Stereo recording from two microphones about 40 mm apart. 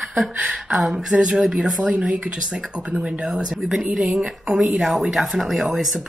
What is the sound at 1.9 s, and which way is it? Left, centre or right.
Speech, right.